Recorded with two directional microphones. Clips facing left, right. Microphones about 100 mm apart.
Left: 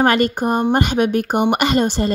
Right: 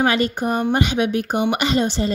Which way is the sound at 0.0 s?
50° left (ahead or behind).